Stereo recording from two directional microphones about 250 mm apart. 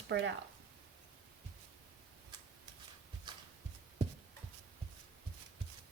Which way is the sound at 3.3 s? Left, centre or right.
Centre.